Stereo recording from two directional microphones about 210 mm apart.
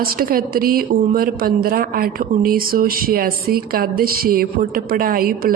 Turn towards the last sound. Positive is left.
turn(degrees=-45)  # may be behind; listen again after turning